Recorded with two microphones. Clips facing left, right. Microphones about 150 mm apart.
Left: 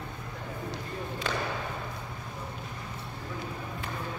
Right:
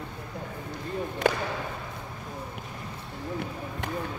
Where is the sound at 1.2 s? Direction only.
55° right (ahead or behind).